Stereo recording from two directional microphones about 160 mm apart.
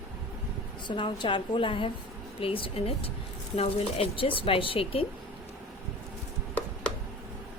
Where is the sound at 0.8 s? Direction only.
30° left (ahead or behind).